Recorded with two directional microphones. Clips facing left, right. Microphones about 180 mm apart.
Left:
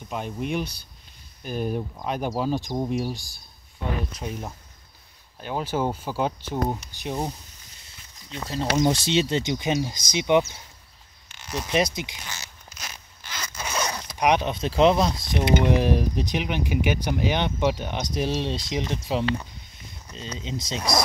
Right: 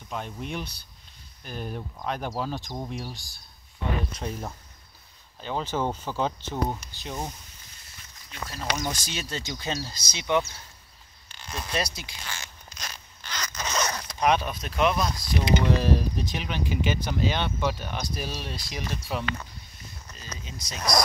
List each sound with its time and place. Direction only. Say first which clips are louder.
0.1 s speech: left 5 dB; 10° left (ahead or behind)
8.3 s speech: left 6 dB; 25° left (ahead or behind)
11.5 s speech: left 7 dB; 20° left (ahead or behind)